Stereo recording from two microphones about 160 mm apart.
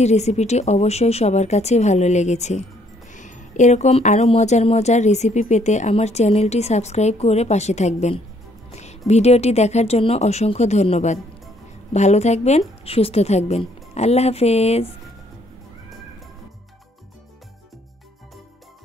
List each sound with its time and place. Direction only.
0.0 s a woman's voice: 45° left (ahead or behind)